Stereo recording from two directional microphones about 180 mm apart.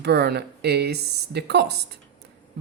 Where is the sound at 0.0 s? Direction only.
65° right (ahead or behind).